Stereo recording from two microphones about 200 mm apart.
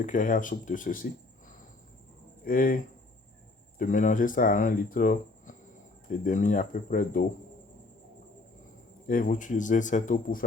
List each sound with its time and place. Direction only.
0.0 s a man's voice: 40° left (ahead or behind)
2.4 s speech: 45° left (ahead or behind)
3.8 s a man's voice: 40° left (ahead or behind)
9.0 s a man's voice: 45° left (ahead or behind)